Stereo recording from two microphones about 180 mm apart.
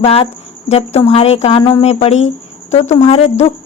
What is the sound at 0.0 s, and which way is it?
Speech, 35° left (ahead or behind).